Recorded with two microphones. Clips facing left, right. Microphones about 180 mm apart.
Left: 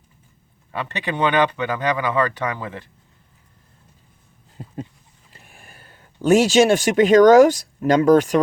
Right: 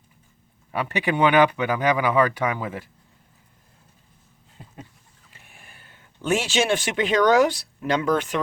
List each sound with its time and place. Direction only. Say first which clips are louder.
0.7 s speech: right 2 dB; 10° right (ahead or behind)
5.3 s speech: left 4 dB; 40° left (ahead or behind)